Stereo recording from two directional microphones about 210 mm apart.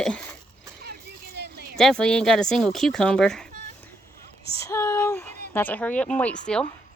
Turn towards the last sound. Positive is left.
turn(degrees=5)  # may be behind; listen again after turning